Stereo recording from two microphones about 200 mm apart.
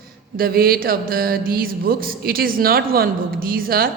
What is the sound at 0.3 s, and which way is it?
A woman's voice, 45° right (ahead or behind).